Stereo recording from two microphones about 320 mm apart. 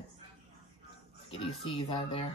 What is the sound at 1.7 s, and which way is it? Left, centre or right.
Speech, centre.